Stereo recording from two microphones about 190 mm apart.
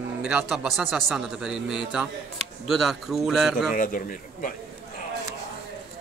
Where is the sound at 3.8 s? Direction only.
45° left (ahead or behind).